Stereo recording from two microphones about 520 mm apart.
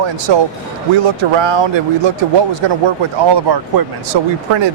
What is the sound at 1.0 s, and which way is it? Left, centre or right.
Speech, right.